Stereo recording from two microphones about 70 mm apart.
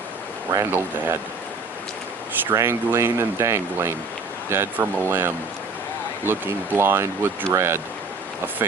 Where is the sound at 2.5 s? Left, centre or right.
Right.